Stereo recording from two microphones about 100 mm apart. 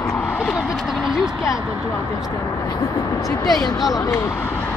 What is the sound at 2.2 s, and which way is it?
Speech, 35° left (ahead or behind).